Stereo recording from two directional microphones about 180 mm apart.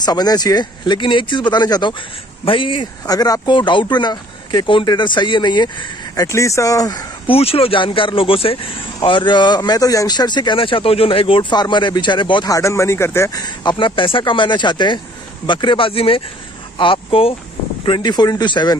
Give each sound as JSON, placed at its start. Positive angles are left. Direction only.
{"t": 0.0, "sound": "speech", "side_deg": 20}
{"t": 7.3, "sound": "speech", "side_deg": 30}